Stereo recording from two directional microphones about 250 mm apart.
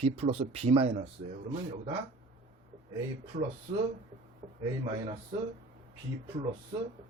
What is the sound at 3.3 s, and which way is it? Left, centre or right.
Speech, right.